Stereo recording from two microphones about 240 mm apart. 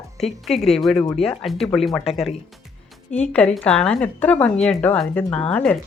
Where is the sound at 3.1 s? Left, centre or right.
Centre.